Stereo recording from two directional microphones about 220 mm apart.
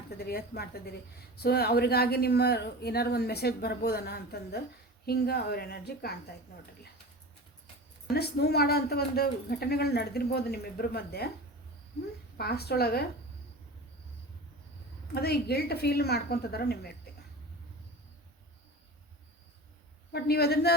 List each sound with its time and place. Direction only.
0.2 s speech: 45° left (ahead or behind)
8.1 s speech: 45° left (ahead or behind)
12.4 s speech: 45° left (ahead or behind)
15.0 s speech: 45° left (ahead or behind)
20.1 s speech: 45° left (ahead or behind)